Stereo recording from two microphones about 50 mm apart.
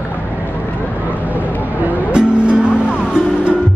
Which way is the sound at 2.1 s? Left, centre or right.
Right.